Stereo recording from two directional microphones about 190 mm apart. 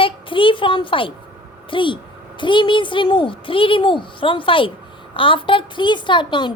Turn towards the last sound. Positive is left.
turn(degrees=25)  # may be behind; listen again after turning